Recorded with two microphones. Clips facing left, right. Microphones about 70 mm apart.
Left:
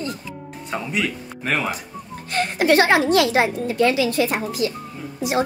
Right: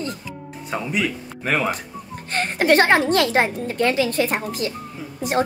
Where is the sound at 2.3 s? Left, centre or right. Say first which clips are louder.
Even; right.